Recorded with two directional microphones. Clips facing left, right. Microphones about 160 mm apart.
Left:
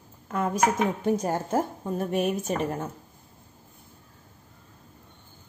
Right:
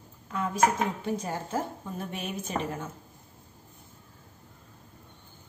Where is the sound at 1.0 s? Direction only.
45° left (ahead or behind).